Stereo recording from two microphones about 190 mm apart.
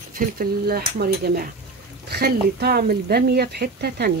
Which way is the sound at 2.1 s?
55° right (ahead or behind).